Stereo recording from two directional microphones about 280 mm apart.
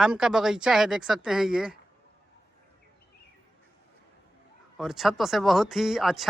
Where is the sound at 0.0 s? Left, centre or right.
Centre.